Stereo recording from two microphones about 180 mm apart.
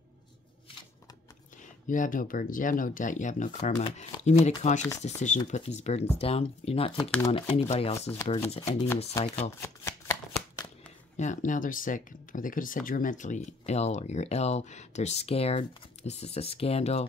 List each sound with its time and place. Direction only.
1.9 s speech: 50° left (ahead or behind)
8.7 s chopping: 15° left (ahead or behind)
9.3 s shuffling cards: 15° left (ahead or behind)
11.1 s speech: 45° left (ahead or behind)